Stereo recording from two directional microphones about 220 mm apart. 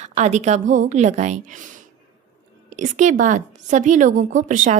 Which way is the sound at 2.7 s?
35° right (ahead or behind).